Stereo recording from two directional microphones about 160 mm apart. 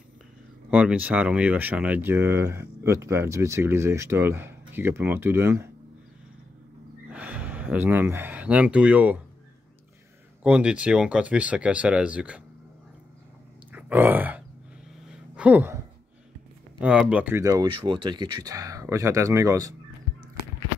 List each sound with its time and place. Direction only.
0.7 s speech: 5° right (ahead or behind)
7.1 s speech: 10° right (ahead or behind)
10.4 s speech: 5° right (ahead or behind)
13.7 s a sound: 10° right (ahead or behind)
15.3 s speech: 10° right (ahead or behind)
16.8 s speech: 5° right (ahead or behind)